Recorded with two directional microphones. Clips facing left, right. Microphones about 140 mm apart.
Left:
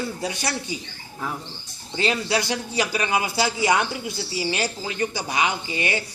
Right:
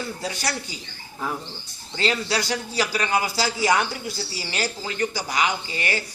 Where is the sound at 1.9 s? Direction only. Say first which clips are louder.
Left 1 dB; 20° left (ahead or behind).